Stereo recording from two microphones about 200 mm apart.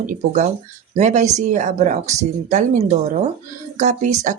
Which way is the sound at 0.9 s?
35° right (ahead or behind).